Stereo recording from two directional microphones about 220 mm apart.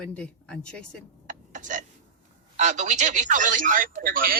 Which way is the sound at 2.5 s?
35° right (ahead or behind).